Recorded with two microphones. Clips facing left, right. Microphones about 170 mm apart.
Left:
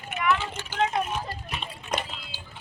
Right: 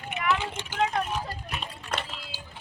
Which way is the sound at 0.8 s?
5° left (ahead or behind).